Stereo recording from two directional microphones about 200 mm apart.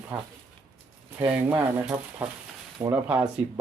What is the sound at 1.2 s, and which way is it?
Speech, 10° right (ahead or behind).